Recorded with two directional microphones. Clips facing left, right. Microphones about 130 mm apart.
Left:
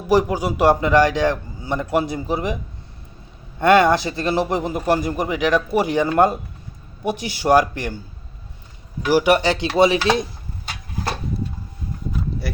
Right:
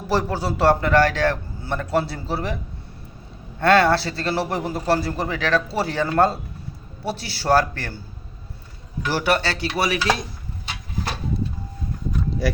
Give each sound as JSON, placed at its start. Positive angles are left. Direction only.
{"t": 0.1, "sound": "a man's voice", "side_deg": 15}
{"t": 3.6, "sound": "a man's voice", "side_deg": 15}
{"t": 9.0, "sound": "a man's voice", "side_deg": 15}